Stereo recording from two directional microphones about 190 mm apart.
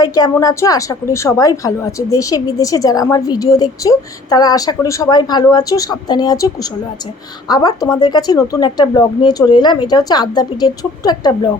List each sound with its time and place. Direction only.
0.0 s a woman's voice: 20° left (ahead or behind)